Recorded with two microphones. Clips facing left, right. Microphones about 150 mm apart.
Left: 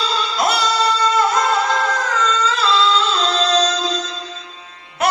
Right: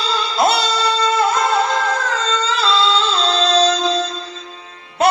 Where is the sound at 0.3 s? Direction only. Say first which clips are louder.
Right 2 dB; 30° right (ahead or behind).